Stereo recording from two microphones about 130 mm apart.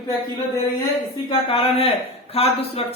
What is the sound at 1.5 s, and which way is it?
Speech, 45° left (ahead or behind).